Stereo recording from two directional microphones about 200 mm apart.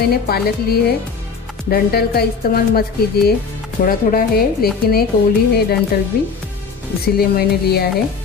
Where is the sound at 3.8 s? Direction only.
50° left (ahead or behind).